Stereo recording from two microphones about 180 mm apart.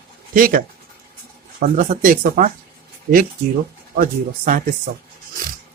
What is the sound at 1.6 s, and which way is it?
Speech, 50° right (ahead or behind).